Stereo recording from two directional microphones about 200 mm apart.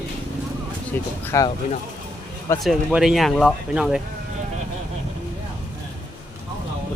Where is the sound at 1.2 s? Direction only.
15° left (ahead or behind).